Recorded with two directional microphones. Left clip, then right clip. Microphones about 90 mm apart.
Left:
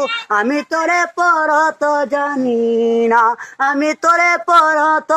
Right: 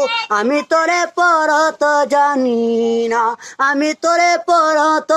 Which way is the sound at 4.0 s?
10° right (ahead or behind).